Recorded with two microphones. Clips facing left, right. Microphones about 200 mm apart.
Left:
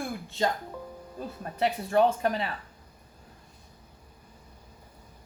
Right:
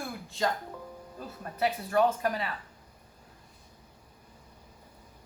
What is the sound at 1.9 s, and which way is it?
Speech, 25° left (ahead or behind).